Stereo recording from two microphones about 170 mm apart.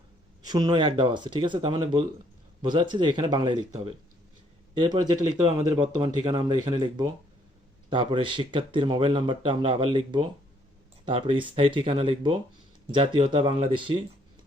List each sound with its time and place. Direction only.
0.4 s speech: 25° right (ahead or behind)